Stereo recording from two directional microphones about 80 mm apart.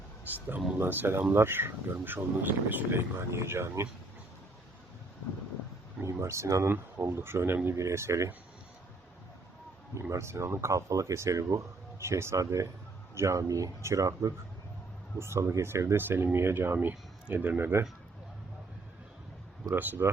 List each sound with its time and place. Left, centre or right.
0.3 s speech: right
6.0 s speech: right
9.9 s speech: right
16.9 s speech: centre
19.7 s speech: right